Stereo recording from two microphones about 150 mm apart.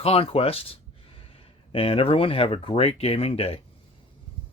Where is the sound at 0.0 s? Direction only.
40° left (ahead or behind).